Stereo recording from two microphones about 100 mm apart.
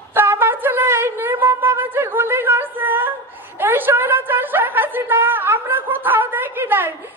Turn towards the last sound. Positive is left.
turn(degrees=-20)  # may be behind; listen again after turning